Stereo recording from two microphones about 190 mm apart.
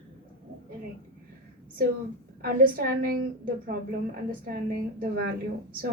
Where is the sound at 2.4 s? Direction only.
50° right (ahead or behind).